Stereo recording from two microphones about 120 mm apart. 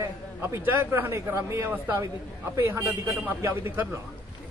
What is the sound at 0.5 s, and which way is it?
A man's voice, 20° right (ahead or behind).